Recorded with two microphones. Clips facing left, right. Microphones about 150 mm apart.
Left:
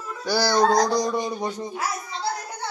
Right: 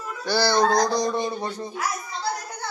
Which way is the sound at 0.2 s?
10° left (ahead or behind).